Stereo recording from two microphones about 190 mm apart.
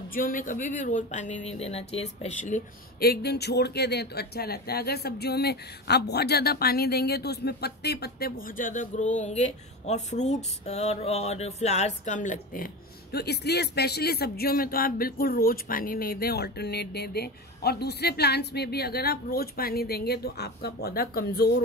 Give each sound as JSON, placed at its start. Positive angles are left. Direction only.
{"t": 0.1, "sound": "speech", "side_deg": 45}
{"t": 3.0, "sound": "speech", "side_deg": 55}